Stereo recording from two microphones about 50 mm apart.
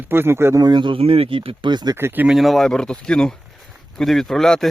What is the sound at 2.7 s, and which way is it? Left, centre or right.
Speech, centre.